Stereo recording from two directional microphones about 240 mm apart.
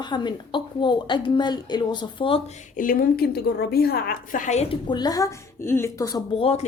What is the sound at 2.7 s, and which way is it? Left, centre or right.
A woman's voice, left.